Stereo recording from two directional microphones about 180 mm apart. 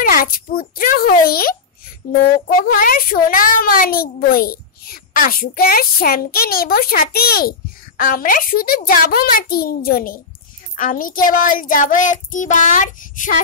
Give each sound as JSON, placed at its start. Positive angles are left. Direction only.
{"t": 0.0, "sound": "a child's voice", "side_deg": 55}
{"t": 2.6, "sound": "a child's voice", "side_deg": 50}
{"t": 8.0, "sound": "child singing", "side_deg": 50}